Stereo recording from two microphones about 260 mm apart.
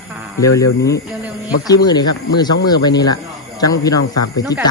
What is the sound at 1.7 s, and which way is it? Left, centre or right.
A man's voice, centre.